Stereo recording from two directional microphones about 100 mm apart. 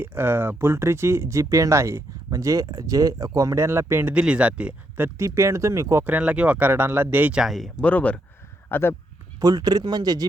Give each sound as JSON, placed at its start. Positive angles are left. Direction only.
{"t": 0.0, "sound": "speech", "side_deg": -20}
{"t": 4.1, "sound": "speech", "side_deg": -10}
{"t": 6.1, "sound": "speech", "side_deg": -15}
{"t": 7.4, "sound": "speech", "side_deg": 0}
{"t": 7.8, "sound": "speech", "side_deg": 15}
{"t": 8.7, "sound": "speech", "side_deg": 25}
{"t": 9.4, "sound": "speech", "side_deg": -40}